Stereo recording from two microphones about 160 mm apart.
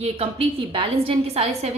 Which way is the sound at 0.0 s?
40° right (ahead or behind).